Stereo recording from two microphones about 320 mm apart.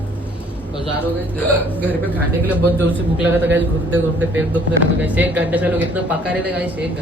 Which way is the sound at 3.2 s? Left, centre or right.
Centre.